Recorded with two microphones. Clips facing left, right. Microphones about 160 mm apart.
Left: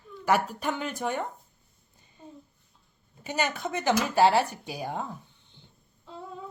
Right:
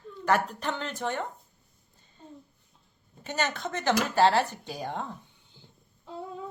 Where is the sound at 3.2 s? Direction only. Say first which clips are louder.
Left 1 dB; 10° left (ahead or behind).